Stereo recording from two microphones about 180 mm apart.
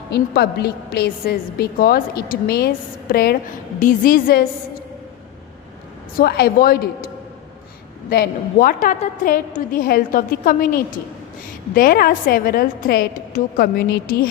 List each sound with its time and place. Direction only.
0.1 s a woman's voice: 60° left (ahead or behind)
3.8 s a woman's voice: 50° left (ahead or behind)
6.1 s a woman's voice: 60° left (ahead or behind)
8.1 s a woman's voice: 55° left (ahead or behind)